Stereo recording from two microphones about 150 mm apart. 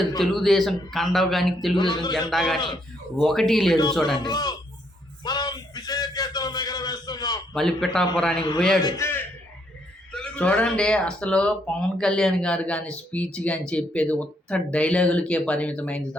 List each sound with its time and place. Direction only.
0.2 s a man's voice: centre (ahead or behind)
1.7 s speech: 30° left (ahead or behind)
2.3 s a man's voice: centre (ahead or behind)
4.2 s speech: 25° left (ahead or behind)
5.2 s a sound: 25° left (ahead or behind)
7.5 s a man's voice: 5° left (ahead or behind)
8.8 s a man's voice: 20° left (ahead or behind)
10.1 s speech: 5° left (ahead or behind)